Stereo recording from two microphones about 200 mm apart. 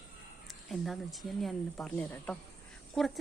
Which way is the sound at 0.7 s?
Centre (ahead or behind).